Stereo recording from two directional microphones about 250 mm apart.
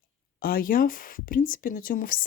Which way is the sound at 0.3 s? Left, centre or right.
Left.